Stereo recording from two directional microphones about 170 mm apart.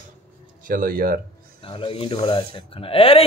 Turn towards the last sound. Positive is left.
turn(degrees=35)  # may be behind; listen again after turning